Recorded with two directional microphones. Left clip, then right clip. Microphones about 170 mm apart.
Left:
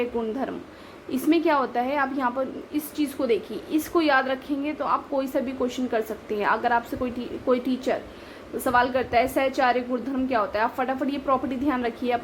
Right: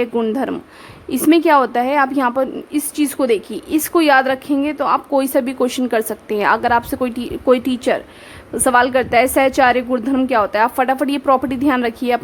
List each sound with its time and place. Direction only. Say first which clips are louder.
0.0 s a woman's voice: right 9 dB; 45° right (ahead or behind)